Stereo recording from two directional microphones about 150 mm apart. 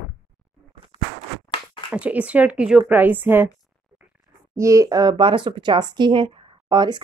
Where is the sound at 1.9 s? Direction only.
10° right (ahead or behind).